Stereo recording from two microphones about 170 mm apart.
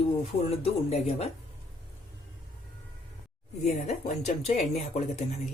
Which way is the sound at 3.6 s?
40° left (ahead or behind).